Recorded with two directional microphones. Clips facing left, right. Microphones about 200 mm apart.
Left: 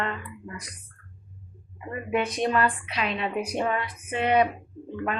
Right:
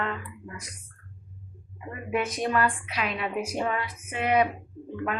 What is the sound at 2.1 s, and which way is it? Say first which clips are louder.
A woman's voice: left 2 dB; 30° left (ahead or behind).